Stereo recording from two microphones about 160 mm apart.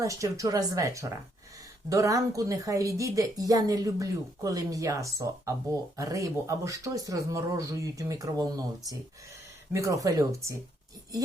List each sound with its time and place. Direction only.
0.0 s a woman's voice: 20° right (ahead or behind)